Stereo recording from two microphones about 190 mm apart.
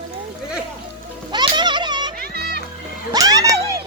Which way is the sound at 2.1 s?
55° right (ahead or behind).